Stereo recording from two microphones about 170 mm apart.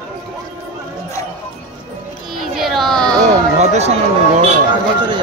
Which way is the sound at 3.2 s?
40° right (ahead or behind).